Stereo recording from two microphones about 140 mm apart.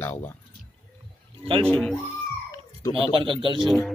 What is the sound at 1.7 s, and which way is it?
Speech, 5° left (ahead or behind).